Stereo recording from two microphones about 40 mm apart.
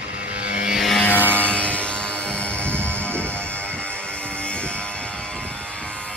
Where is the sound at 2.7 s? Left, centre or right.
Right.